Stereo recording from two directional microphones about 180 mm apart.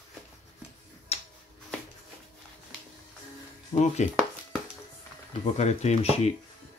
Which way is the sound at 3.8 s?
40° left (ahead or behind).